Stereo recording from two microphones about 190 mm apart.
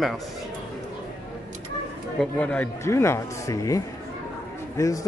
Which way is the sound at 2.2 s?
5° left (ahead or behind).